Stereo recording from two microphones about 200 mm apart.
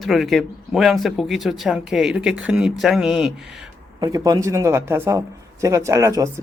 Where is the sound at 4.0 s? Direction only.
20° right (ahead or behind).